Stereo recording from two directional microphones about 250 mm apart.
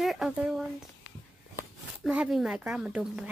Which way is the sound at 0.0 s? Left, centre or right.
Centre.